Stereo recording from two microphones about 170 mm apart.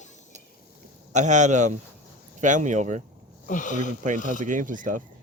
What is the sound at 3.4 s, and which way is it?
Speech, 50° left (ahead or behind).